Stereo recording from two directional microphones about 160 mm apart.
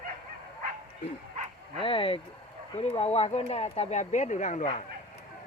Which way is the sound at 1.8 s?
35° left (ahead or behind).